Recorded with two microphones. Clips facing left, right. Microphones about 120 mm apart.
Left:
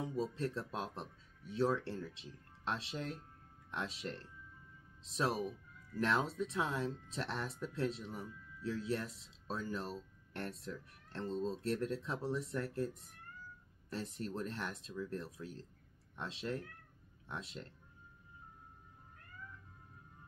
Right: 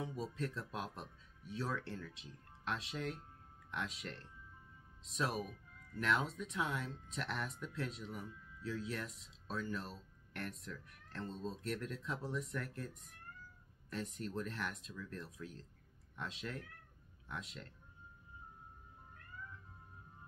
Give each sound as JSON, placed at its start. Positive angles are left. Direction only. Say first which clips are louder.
{"t": 0.0, "sound": "speech", "louder": "left 4 dB", "side_deg": 30}